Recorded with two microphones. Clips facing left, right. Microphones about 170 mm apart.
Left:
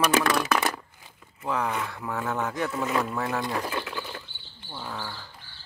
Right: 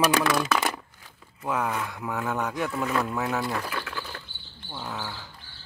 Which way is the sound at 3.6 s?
20° left (ahead or behind).